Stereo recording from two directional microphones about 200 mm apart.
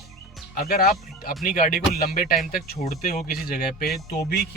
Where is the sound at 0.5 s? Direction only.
45° left (ahead or behind).